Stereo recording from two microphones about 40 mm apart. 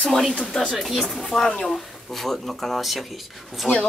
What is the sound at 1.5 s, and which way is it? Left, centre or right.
Speech, centre.